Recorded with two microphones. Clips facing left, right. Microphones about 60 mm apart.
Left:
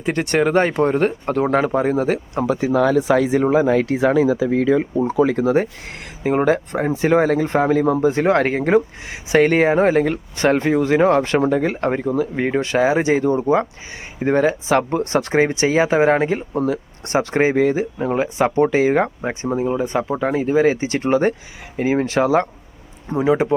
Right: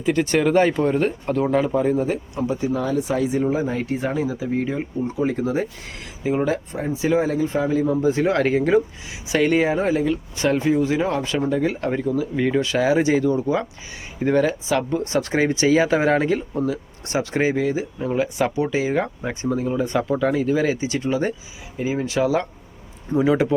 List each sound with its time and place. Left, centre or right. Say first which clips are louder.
0.0 s speech: left 1 dB; left
6.2 s speech: left 5 dB; left
14.8 s speech: left 3 dB; left
15.3 s speech: even; left
19.3 s speech: left 3 dB; left
23.1 s speech: left 1 dB; left